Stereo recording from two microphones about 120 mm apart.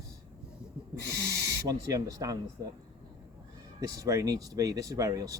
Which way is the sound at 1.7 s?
30° right (ahead or behind).